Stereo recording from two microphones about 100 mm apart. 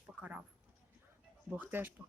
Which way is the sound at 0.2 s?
15° right (ahead or behind).